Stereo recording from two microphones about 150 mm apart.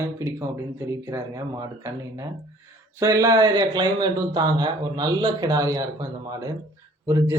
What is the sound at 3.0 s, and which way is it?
Speech, 20° right (ahead or behind).